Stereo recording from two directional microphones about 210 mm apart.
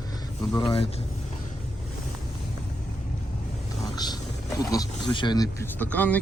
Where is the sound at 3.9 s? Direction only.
20° left (ahead or behind).